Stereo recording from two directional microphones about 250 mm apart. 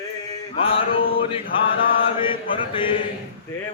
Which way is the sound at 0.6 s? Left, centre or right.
Left.